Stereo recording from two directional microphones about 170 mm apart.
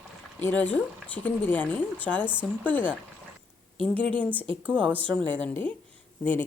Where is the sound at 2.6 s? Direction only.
10° left (ahead or behind).